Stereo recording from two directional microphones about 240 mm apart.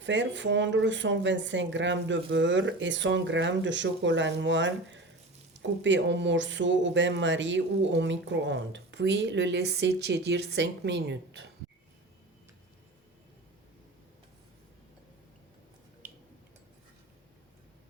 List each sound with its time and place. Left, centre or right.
0.0 s speech: right